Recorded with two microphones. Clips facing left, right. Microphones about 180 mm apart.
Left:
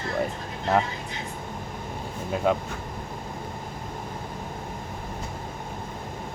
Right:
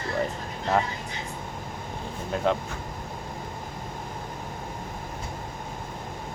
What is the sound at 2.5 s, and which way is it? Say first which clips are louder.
Speech: left 1 dB; 10° left (ahead or behind).